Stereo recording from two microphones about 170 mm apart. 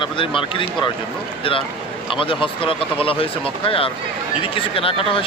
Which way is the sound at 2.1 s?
30° left (ahead or behind).